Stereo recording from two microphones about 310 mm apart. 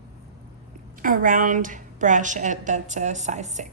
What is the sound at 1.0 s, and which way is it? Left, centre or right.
A woman's voice, right.